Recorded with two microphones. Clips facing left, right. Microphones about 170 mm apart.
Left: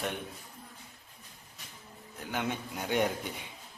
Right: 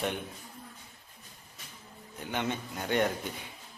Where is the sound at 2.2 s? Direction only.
5° left (ahead or behind).